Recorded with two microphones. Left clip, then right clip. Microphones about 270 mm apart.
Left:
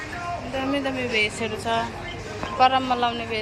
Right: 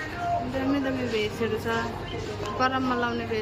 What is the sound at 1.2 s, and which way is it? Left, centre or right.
A man's voice, centre.